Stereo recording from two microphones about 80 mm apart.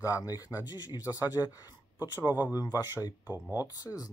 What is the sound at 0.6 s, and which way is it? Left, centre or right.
Speech, left.